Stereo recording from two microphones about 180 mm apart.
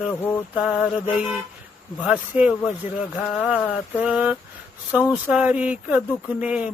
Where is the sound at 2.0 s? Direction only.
10° right (ahead or behind).